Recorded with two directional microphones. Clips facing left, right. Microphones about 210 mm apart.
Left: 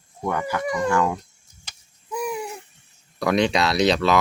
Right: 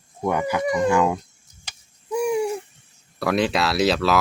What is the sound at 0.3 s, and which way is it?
Speech, 15° right (ahead or behind).